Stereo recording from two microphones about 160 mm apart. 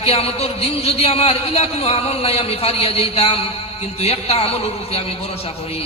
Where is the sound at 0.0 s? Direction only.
40° left (ahead or behind).